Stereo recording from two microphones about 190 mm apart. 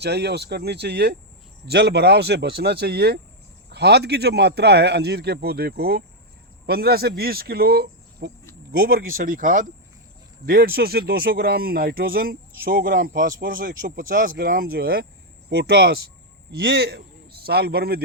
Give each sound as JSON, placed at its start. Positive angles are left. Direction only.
{"t": 0.0, "sound": "a man's voice", "side_deg": -60}